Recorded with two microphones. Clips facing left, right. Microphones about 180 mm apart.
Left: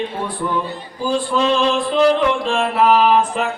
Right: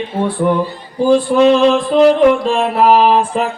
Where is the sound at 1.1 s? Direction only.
60° right (ahead or behind).